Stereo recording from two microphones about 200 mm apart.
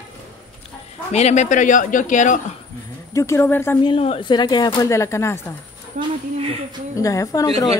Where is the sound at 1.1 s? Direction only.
35° left (ahead or behind).